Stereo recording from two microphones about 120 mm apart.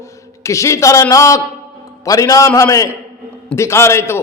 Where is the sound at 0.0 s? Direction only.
25° left (ahead or behind).